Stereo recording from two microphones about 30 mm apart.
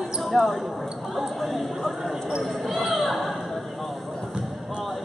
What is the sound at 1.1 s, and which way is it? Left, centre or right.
Clip-clop, centre.